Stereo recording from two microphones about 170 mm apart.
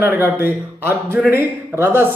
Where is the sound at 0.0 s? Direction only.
10° right (ahead or behind).